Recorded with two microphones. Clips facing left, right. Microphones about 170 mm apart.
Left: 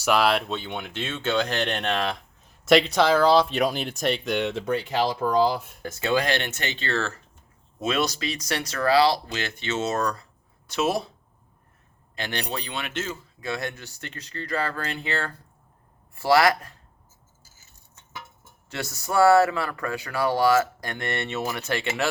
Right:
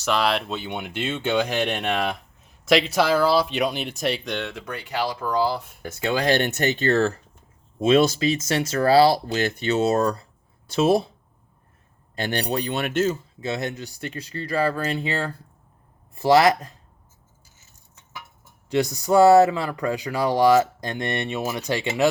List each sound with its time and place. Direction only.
0.0 s speech: 5° left (ahead or behind)
4.4 s speech: 20° left (ahead or behind)
5.8 s speech: 15° right (ahead or behind)
6.4 s speech: 40° right (ahead or behind)
7.8 s speech: 30° right (ahead or behind)
12.1 s speech: 40° right (ahead or behind)
13.4 s speech: 25° right (ahead or behind)
18.7 s speech: 15° right (ahead or behind)